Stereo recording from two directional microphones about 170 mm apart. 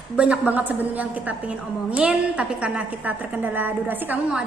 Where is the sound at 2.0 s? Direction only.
5° right (ahead or behind).